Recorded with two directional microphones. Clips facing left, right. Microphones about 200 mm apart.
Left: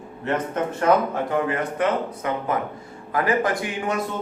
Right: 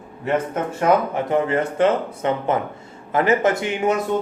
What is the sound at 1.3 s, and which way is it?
A man's voice, 25° right (ahead or behind).